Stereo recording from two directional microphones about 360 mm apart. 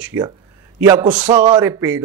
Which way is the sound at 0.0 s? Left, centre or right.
Centre.